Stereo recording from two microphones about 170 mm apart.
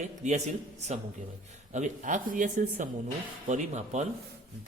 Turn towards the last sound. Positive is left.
turn(degrees=-45)  # may be behind; listen again after turning